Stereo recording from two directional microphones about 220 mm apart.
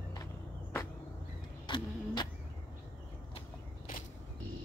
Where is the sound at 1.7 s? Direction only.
20° left (ahead or behind).